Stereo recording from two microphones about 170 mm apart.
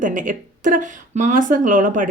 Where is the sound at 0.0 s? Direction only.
50° right (ahead or behind).